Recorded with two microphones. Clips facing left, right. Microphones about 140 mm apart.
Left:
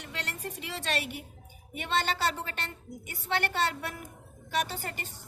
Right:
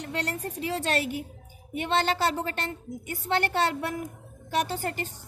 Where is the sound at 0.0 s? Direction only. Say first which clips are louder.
Right 7 dB; 40° right (ahead or behind).